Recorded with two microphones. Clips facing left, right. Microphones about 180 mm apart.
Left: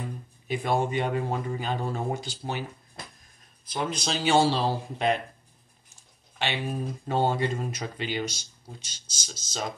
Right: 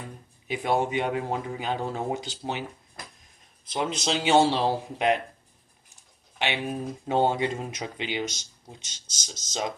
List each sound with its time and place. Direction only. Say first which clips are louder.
0.5 s speech: right 1 dB; 15° right (ahead or behind)
3.6 s speech: right 2 dB; 25° right (ahead or behind)
6.3 s speech: right 1 dB; 15° right (ahead or behind)